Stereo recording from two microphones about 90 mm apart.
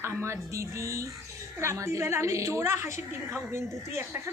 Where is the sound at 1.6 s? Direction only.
30° right (ahead or behind).